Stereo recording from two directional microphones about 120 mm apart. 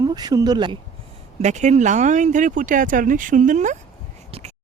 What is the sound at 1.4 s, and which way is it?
Speech, 75° right (ahead or behind).